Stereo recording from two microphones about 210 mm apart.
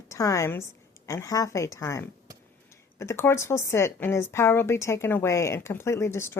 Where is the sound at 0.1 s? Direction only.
15° left (ahead or behind).